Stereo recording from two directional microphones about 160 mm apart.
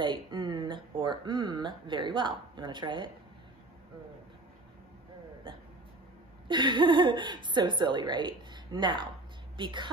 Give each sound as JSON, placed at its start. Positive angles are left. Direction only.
{"t": 0.0, "sound": "speech", "side_deg": -30}
{"t": 6.4, "sound": "speech", "side_deg": -30}